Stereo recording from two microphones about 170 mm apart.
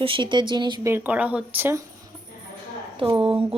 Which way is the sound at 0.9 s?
10° right (ahead or behind).